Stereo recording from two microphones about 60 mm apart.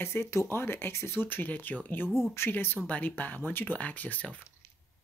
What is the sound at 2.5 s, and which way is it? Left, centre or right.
Speech, left.